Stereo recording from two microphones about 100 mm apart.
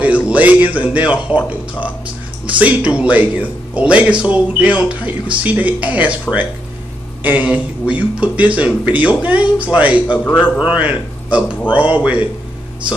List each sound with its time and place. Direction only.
0.0 s speech: 15° right (ahead or behind)
7.2 s speech: 15° right (ahead or behind)
10.1 s a man's voice: 15° left (ahead or behind)
10.6 s speech: 15° right (ahead or behind)